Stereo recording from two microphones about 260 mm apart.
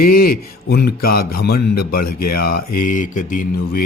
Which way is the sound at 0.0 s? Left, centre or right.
Left.